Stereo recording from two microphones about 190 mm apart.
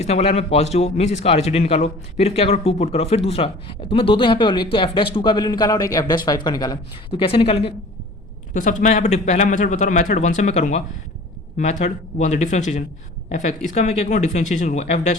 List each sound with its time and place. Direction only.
0.0 s speech: 35° left (ahead or behind)
8.5 s speech: 40° left (ahead or behind)